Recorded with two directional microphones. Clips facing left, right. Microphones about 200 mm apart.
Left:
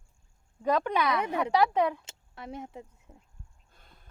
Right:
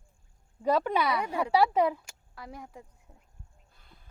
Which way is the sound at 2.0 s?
25° left (ahead or behind).